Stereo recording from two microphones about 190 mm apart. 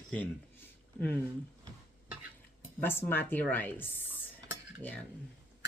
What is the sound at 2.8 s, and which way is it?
A woman's voice, 10° left (ahead or behind).